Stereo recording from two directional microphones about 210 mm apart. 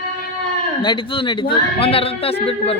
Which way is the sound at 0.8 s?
25° left (ahead or behind).